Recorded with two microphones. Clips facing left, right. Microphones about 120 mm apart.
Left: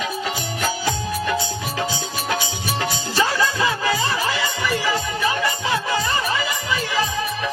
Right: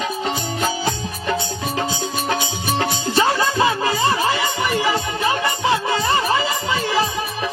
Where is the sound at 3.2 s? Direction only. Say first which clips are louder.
Right 3 dB; 25° right (ahead or behind).